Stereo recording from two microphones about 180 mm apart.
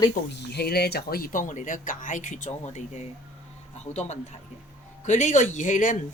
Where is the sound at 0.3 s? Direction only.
65° left (ahead or behind); by 3.0 s 40° left (ahead or behind).